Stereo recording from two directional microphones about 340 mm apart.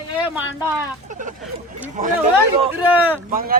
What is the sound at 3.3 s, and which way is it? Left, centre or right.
Speech, right.